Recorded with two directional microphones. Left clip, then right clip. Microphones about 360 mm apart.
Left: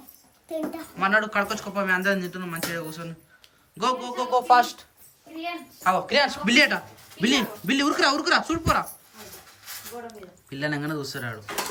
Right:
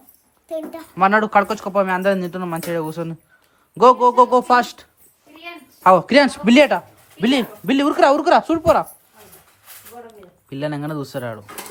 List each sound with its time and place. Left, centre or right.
0.4 s a child's voice: centre
0.9 s a man's voice: centre
10.1 s speech: centre